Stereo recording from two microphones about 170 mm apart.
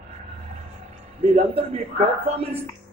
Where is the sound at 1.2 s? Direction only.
35° right (ahead or behind).